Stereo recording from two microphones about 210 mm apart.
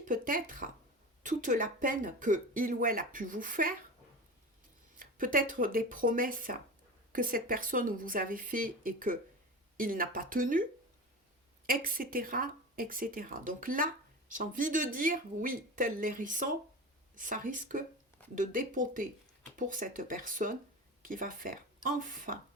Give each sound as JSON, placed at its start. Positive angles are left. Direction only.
{"t": 0.0, "sound": "speech", "side_deg": -40}
{"t": 4.9, "sound": "speech", "side_deg": -40}